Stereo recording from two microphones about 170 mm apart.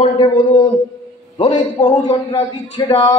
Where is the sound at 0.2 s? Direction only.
30° left (ahead or behind).